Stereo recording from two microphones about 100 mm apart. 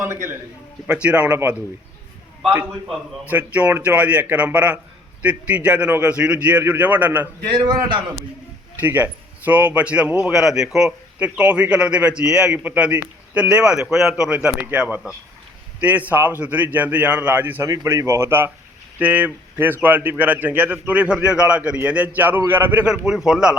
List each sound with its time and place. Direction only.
0.0 s speech: 25° right (ahead or behind)
1.0 s speech: 15° right (ahead or behind)
3.2 s speech: 15° right (ahead or behind)
7.5 s a man's voice: 45° right (ahead or behind)
8.8 s speech: 20° right (ahead or behind)
17.7 s speech: 30° right (ahead or behind)
22.9 s speech: 5° right (ahead or behind)